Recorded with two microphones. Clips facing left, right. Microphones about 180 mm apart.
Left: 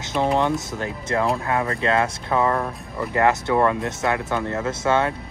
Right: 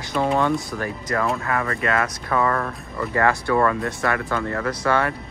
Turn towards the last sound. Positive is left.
turn(degrees=20)  # may be behind; listen again after turning